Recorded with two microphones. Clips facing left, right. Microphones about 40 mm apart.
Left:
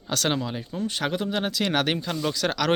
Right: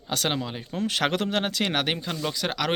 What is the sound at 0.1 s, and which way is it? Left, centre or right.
Speech, right.